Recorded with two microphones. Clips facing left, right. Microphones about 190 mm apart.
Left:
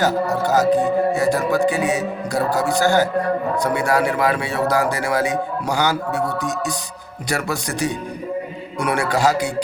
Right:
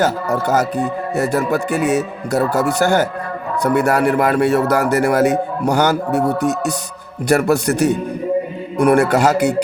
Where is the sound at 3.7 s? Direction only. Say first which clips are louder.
Right 7 dB; 60° right (ahead or behind).